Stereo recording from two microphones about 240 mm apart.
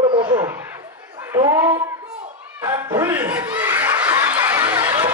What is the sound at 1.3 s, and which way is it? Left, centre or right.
Speech, centre.